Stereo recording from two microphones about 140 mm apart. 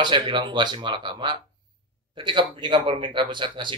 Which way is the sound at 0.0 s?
35° right (ahead or behind).